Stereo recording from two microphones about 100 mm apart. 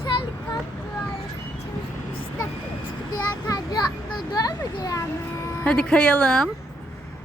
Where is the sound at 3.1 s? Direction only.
40° left (ahead or behind).